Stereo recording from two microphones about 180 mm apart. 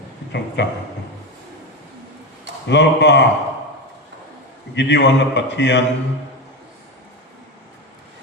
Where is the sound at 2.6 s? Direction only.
75° left (ahead or behind).